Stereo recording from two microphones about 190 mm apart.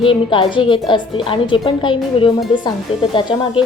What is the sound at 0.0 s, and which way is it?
A woman's voice, 25° left (ahead or behind).